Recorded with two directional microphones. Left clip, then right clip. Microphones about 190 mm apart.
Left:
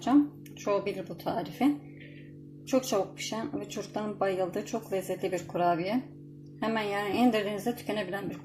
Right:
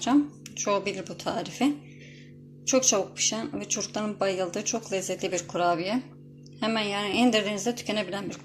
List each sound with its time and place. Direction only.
0.6 s speech: 10° right (ahead or behind)